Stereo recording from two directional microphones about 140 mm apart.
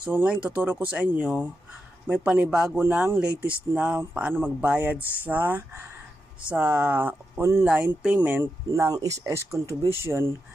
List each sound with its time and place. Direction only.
0.1 s speech: 10° right (ahead or behind)